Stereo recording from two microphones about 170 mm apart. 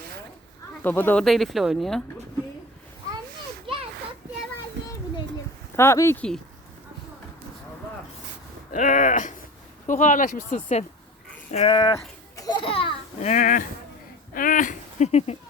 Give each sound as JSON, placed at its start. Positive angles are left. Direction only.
{"t": 0.8, "sound": "speech", "side_deg": 10}
{"t": 3.7, "sound": "children playing", "side_deg": -30}
{"t": 4.8, "sound": "children playing", "side_deg": -90}
{"t": 5.7, "sound": "speech", "side_deg": 15}
{"t": 8.7, "sound": "speech", "side_deg": 50}
{"t": 11.5, "sound": "speech", "side_deg": 30}
{"t": 12.4, "sound": "a sound", "side_deg": 25}
{"t": 13.3, "sound": "speech", "side_deg": 50}